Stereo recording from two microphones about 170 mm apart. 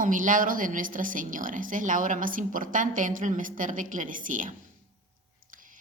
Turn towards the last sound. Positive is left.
turn(degrees=-50)  # may be behind; listen again after turning